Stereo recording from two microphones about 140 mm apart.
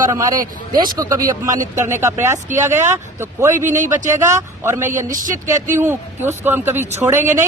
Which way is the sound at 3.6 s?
65° right (ahead or behind).